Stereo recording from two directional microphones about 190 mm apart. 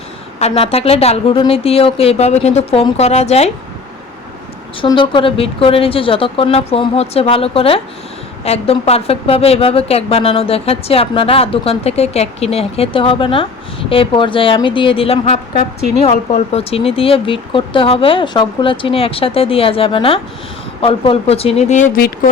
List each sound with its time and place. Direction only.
0.3 s speech: 35° left (ahead or behind)
4.8 s speech: 25° left (ahead or behind)